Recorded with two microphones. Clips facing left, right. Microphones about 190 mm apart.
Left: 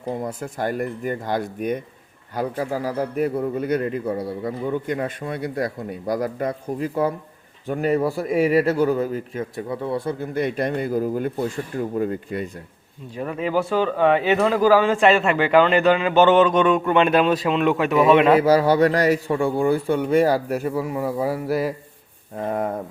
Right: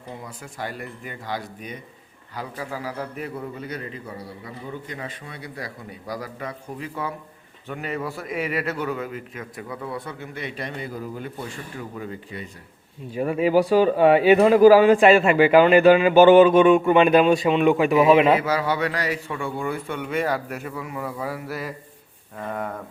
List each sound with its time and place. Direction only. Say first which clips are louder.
0.2 s a man's voice: left 8 dB; 45° left (ahead or behind)
13.1 s a man's voice: right 4 dB; 10° right (ahead or behind)
18.3 s speech: left 8 dB; 40° left (ahead or behind)